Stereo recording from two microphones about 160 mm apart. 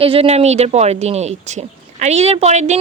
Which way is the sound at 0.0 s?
35° right (ahead or behind).